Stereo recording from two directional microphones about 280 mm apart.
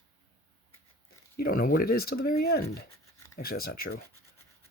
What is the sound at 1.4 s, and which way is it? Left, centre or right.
Speech, left.